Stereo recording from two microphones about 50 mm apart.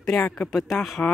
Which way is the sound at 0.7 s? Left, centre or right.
Centre.